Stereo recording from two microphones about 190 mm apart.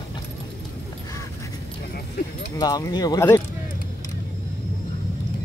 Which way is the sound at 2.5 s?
20° left (ahead or behind).